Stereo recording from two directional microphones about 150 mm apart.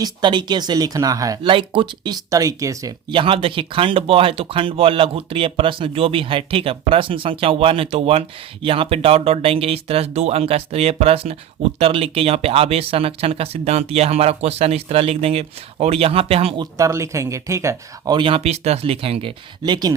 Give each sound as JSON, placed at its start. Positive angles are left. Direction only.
{"t": 0.0, "sound": "speech", "side_deg": -30}
{"t": 1.5, "sound": "speech", "side_deg": -35}
{"t": 3.1, "sound": "speech", "side_deg": -35}
{"t": 16.7, "sound": "speech", "side_deg": -20}